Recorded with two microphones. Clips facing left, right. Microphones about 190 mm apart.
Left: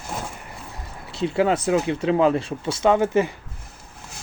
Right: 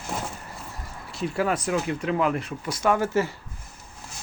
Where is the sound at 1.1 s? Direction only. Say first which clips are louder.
Left 5 dB; 25° left (ahead or behind).